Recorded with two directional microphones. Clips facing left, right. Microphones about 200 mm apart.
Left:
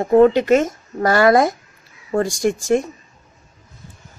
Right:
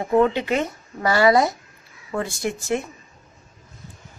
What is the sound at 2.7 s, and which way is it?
Speech, 40° left (ahead or behind).